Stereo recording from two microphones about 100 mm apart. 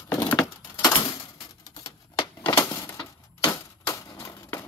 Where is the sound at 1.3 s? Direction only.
35° left (ahead or behind).